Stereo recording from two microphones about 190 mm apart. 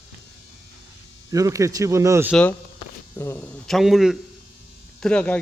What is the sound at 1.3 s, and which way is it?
Speech, 15° right (ahead or behind).